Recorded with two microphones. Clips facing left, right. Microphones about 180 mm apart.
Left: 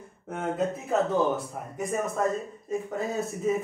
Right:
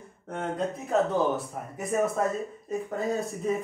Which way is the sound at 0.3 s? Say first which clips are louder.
Left 2 dB; 5° left (ahead or behind).